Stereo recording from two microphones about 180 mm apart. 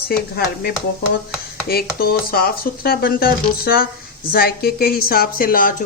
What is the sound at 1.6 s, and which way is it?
A woman's voice, 55° left (ahead or behind).